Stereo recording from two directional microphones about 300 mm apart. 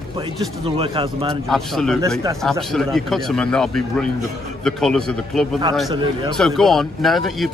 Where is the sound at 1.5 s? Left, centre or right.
Centre.